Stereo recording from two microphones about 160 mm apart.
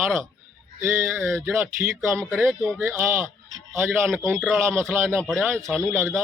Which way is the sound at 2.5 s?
5° left (ahead or behind).